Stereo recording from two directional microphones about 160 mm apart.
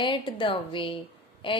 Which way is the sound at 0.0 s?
30° left (ahead or behind).